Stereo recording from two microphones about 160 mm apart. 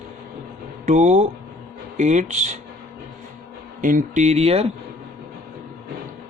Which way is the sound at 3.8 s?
55° right (ahead or behind).